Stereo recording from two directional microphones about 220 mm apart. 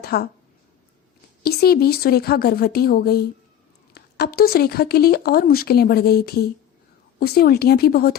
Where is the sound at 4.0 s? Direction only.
45° left (ahead or behind).